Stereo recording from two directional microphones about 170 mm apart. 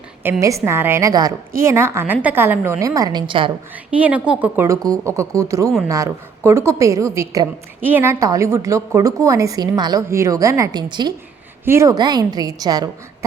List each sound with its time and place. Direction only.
0.2 s a woman's voice: 15° right (ahead or behind)
4.3 s a woman's voice: 10° right (ahead or behind)